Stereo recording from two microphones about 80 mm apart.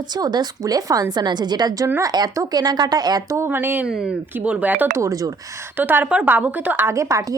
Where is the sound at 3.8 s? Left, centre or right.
Centre.